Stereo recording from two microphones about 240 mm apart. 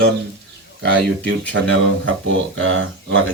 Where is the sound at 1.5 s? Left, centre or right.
Right.